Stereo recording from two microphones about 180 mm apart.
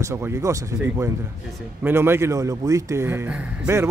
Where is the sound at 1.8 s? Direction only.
15° right (ahead or behind).